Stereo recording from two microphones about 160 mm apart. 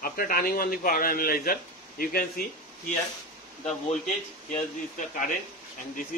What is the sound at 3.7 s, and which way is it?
Speech, 50° left (ahead or behind).